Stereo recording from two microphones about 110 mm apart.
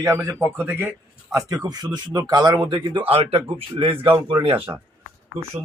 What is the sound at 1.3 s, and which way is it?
Speech, 35° right (ahead or behind).